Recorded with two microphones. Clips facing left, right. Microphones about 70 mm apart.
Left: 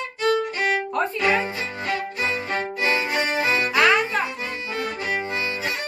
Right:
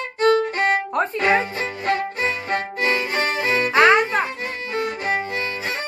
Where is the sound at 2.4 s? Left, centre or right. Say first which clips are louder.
Right 2 dB; right.